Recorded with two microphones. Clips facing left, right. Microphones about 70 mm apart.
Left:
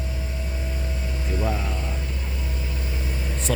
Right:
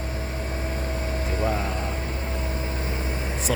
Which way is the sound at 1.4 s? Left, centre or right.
Right.